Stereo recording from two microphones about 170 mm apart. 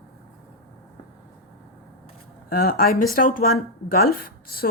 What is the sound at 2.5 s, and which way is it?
Speech, 60° left (ahead or behind).